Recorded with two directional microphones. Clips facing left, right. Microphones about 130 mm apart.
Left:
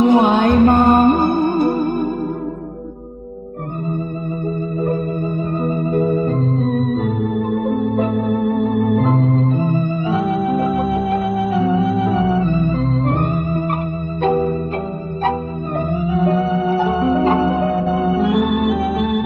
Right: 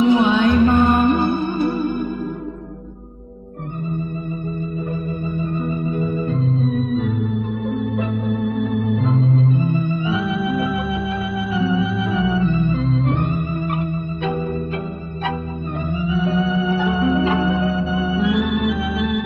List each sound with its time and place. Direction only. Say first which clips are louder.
0.0 s music: left 2 dB; 50° left (ahead or behind)
5.6 s organ: left 7 dB; 55° left (ahead or behind)
14.2 s music: left 8 dB; 50° left (ahead or behind)
15.9 s organ: left 3 dB; 55° left (ahead or behind)